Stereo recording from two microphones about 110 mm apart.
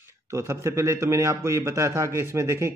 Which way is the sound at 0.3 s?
25° right (ahead or behind).